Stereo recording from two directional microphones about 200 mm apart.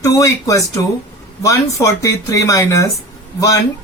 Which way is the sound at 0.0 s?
15° left (ahead or behind).